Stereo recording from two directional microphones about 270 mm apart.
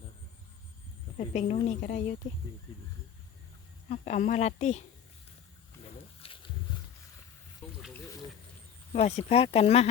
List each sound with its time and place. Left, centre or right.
1.3 s a woman's voice: left
3.8 s a woman's voice: left
6.2 s wild animals: centre
8.9 s a woman's voice: left